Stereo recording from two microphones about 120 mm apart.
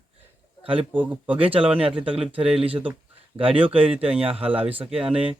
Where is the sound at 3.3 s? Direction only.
50° right (ahead or behind).